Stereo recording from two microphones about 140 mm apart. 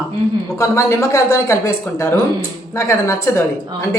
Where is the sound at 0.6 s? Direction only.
20° left (ahead or behind).